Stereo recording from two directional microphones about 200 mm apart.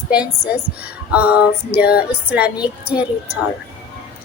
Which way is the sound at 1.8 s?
50° left (ahead or behind).